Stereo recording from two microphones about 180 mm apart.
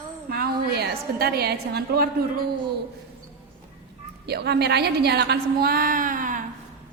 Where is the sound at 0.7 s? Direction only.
60° right (ahead or behind).